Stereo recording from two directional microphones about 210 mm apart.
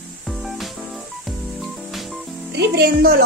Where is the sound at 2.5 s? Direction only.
50° right (ahead or behind).